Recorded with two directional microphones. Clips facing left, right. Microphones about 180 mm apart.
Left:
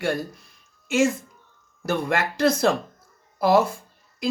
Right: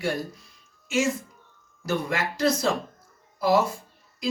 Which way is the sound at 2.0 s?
55° left (ahead or behind).